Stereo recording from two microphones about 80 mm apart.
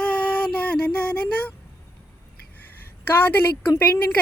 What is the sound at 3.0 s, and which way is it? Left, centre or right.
A woman's voice, left.